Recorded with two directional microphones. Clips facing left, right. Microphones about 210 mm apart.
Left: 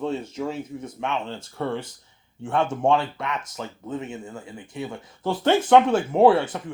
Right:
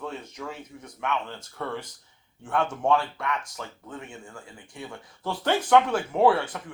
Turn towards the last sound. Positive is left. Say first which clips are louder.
# left 5 dB
turn(degrees=25)  # may be behind; listen again after turning